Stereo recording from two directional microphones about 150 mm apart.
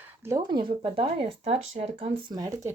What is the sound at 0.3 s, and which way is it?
Speech, 25° right (ahead or behind).